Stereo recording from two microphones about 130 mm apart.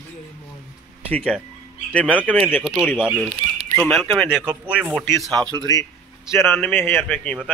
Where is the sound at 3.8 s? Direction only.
Centre (ahead or behind).